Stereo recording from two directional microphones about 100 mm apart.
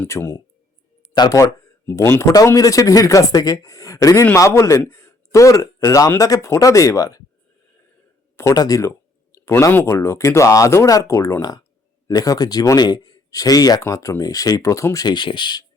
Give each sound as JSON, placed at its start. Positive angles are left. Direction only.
{"t": 0.1, "sound": "speech", "side_deg": 30}
{"t": 1.1, "sound": "speech", "side_deg": 45}
{"t": 1.9, "sound": "speech", "side_deg": 25}
{"t": 8.5, "sound": "speech", "side_deg": 35}
{"t": 9.3, "sound": "a sound", "side_deg": 30}
{"t": 9.7, "sound": "speech", "side_deg": 25}
{"t": 15.0, "sound": "speech", "side_deg": 50}